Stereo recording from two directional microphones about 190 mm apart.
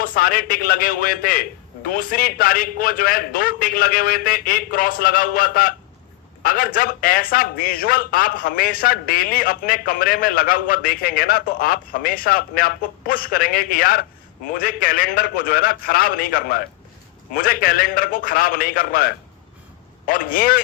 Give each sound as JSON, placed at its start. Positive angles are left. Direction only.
{"t": 0.0, "sound": "a man's voice", "side_deg": 50}